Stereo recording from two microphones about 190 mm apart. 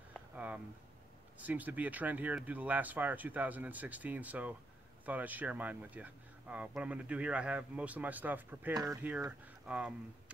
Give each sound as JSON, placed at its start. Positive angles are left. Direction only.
{"t": 1.4, "sound": "speech", "side_deg": -10}
{"t": 9.7, "sound": "speech", "side_deg": -5}